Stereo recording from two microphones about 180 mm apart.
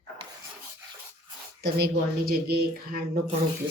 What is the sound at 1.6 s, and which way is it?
Speech, 60° right (ahead or behind).